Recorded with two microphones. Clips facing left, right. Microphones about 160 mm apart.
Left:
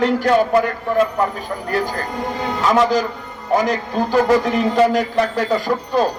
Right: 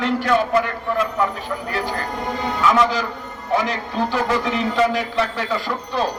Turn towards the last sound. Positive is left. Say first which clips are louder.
# left 5 dB
turn(degrees=45)  # may be behind; listen again after turning